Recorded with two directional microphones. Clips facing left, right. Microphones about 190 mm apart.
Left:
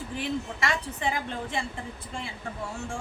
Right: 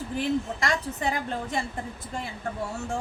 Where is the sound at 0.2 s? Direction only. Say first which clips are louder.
Right 4 dB; 40° right (ahead or behind).